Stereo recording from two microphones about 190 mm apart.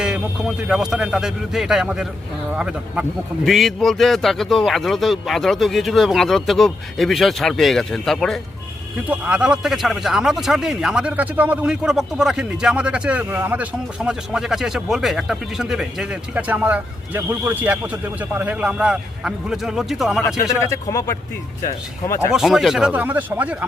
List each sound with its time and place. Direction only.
0.0 s speech: 5° right (ahead or behind)
20.6 s speech: 15° left (ahead or behind)
22.3 s speech: 5° right (ahead or behind)